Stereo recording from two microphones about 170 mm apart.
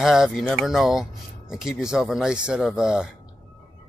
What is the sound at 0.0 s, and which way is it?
Speech, centre (ahead or behind).